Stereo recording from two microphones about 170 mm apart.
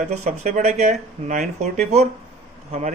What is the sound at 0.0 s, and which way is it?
Speech, 40° right (ahead or behind).